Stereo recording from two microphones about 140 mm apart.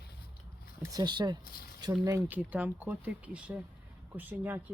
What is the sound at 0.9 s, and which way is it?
Speech, 30° right (ahead or behind).